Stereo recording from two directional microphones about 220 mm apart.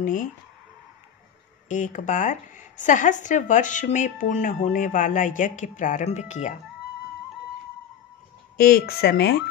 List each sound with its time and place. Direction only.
0.0 s a woman's voice: 35° left (ahead or behind)
1.7 s a woman's voice: 35° left (ahead or behind)
8.5 s speech: 40° left (ahead or behind)